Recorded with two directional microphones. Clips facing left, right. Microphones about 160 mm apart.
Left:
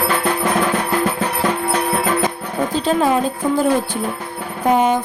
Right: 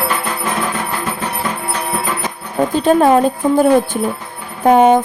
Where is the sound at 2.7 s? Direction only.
55° right (ahead or behind).